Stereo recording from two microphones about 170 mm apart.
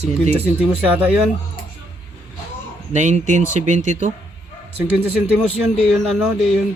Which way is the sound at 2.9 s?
45° right (ahead or behind).